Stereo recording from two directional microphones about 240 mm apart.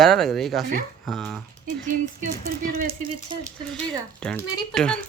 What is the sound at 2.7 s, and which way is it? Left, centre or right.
Speech, right.